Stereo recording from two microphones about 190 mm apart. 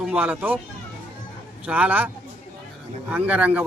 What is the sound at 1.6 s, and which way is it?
Speech, 5° right (ahead or behind).